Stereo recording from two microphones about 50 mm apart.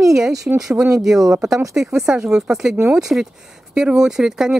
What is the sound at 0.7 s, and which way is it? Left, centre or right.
Speech, right.